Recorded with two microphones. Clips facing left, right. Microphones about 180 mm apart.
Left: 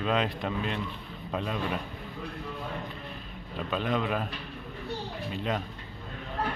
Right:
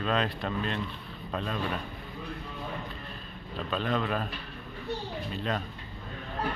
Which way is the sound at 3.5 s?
15° left (ahead or behind).